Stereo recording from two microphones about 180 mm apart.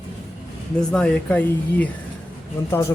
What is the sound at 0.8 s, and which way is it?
Speech, 5° left (ahead or behind).